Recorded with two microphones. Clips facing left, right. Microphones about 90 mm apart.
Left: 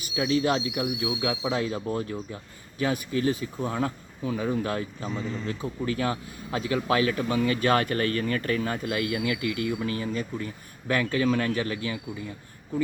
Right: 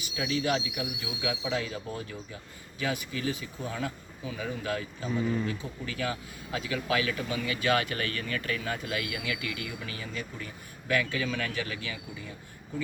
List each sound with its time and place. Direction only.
0.2 s speech: 35° left (ahead or behind)
5.1 s speech: 15° right (ahead or behind)
5.5 s speech: 35° left (ahead or behind)